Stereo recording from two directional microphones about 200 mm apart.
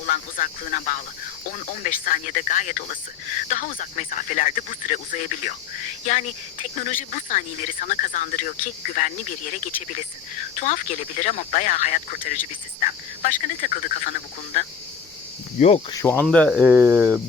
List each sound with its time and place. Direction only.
0.1 s speech: 40° left (ahead or behind)
15.9 s speech: 15° left (ahead or behind)
16.6 s speech: 10° right (ahead or behind)